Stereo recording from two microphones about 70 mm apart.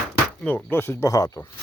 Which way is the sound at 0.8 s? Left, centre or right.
Left.